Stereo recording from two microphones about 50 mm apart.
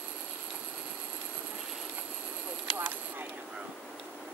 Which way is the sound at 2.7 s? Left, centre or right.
Right.